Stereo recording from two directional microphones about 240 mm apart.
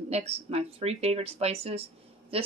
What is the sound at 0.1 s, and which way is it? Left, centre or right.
Speech, right.